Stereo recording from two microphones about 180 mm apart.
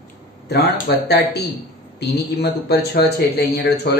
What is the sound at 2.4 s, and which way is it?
Speech, 65° left (ahead or behind).